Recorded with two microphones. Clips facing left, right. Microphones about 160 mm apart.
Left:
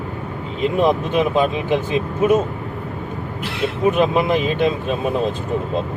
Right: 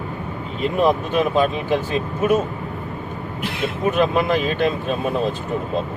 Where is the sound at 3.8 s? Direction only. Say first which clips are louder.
Left 2 dB; 20° left (ahead or behind).